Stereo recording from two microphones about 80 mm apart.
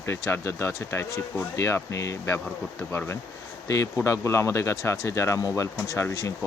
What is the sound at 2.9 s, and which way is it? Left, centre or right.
Speech, left.